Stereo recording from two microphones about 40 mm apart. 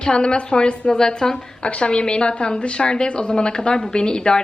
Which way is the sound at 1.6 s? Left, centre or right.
Left.